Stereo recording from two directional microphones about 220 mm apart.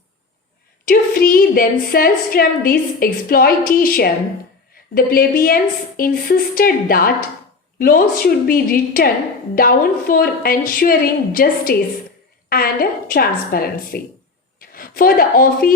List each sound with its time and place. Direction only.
0.9 s a woman's voice: 40° left (ahead or behind)